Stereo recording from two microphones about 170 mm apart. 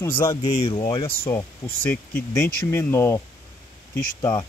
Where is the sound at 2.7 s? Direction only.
15° left (ahead or behind).